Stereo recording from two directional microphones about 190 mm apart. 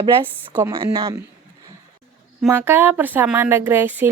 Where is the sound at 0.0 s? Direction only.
25° right (ahead or behind).